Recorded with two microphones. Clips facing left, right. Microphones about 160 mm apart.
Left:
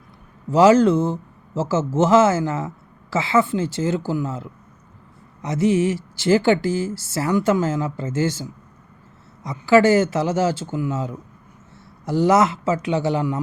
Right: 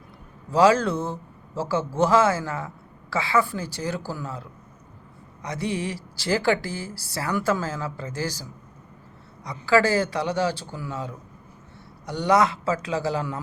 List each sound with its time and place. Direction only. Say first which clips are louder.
0.5 s speech: left 5 dB; 20° left (ahead or behind)